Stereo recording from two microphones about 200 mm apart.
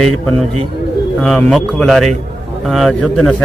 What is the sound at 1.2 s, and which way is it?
Speech, 5° left (ahead or behind).